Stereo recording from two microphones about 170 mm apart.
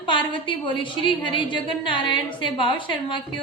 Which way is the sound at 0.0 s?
30° left (ahead or behind).